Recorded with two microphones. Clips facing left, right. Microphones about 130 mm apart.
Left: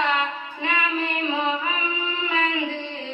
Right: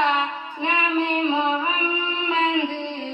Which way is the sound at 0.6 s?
25° right (ahead or behind).